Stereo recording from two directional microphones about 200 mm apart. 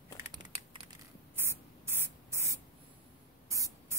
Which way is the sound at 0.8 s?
10° right (ahead or behind).